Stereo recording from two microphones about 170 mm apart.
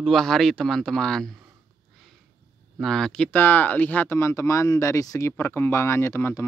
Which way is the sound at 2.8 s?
5° left (ahead or behind).